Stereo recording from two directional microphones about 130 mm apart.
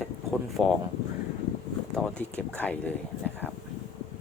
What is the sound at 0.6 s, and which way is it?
Speech, centre (ahead or behind).